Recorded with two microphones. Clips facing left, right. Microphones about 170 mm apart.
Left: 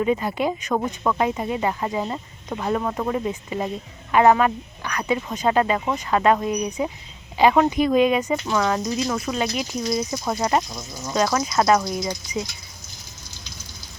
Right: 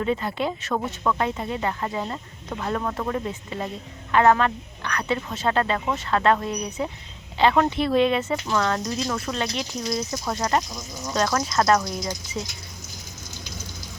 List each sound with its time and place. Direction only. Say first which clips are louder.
0.0 s speech: left 3 dB; 15° left (ahead or behind)